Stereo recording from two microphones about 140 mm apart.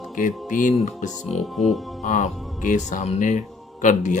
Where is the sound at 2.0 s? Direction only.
60° left (ahead or behind).